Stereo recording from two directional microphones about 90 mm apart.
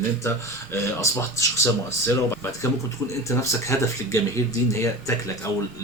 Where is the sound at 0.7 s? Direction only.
35° left (ahead or behind).